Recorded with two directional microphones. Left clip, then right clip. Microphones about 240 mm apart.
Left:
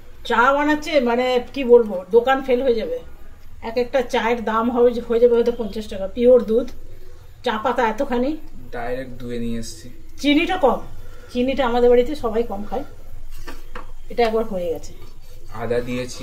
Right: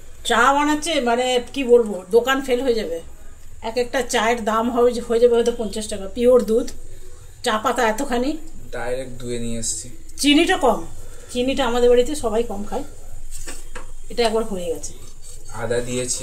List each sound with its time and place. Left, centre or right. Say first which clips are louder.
0.2 s a woman's voice: even; right
8.6 s speech: right 1 dB; centre
10.1 s a woman's voice: right 2 dB; centre
14.1 s speech: left 1 dB; centre